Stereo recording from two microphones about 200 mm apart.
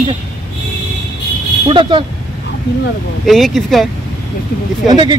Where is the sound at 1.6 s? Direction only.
25° right (ahead or behind).